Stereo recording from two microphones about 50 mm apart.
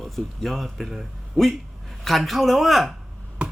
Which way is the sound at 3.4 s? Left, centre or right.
Right.